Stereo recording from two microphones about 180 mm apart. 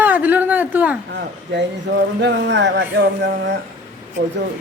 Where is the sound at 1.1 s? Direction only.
75° right (ahead or behind).